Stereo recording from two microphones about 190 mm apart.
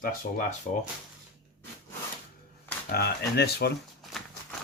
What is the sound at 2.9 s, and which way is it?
Speech, 55° left (ahead or behind).